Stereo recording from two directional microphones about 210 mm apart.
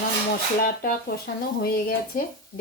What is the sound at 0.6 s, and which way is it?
Speech, 45° left (ahead or behind).